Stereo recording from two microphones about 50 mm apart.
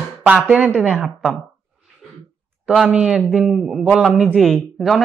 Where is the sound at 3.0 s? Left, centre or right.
Centre.